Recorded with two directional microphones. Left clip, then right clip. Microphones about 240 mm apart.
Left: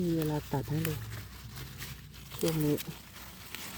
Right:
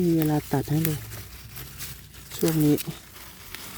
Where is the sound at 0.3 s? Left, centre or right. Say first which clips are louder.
Right 9 dB; right.